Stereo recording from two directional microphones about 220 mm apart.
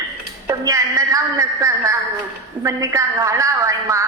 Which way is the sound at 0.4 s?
15° right (ahead or behind).